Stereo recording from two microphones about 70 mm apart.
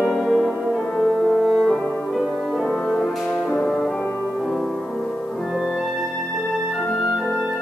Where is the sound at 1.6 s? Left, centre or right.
Centre.